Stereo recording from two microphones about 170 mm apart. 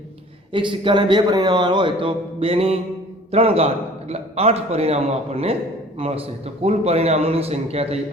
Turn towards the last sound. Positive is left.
turn(degrees=-35)  # may be behind; listen again after turning